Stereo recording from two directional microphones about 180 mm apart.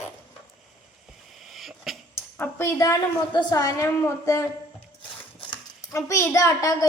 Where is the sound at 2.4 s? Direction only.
15° left (ahead or behind).